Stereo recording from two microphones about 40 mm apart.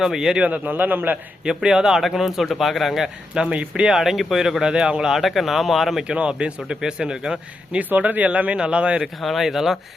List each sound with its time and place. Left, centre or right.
0.0 s speech: centre
0.4 s a man's voice: right
0.7 s a man's voice: right
1.5 s speech: centre
3.4 s speech: right
3.9 s speech: centre
5.1 s speech: centre
6.1 s speech: right
7.8 s speech: right
8.5 s speech: right
9.2 s speech: centre